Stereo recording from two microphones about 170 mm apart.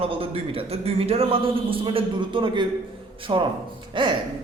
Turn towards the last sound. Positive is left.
turn(degrees=-30)  # may be behind; listen again after turning